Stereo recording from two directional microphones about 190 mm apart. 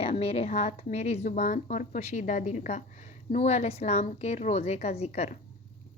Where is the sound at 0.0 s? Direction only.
30° left (ahead or behind).